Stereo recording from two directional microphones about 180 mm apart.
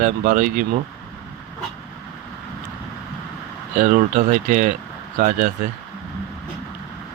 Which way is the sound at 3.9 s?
50° right (ahead or behind).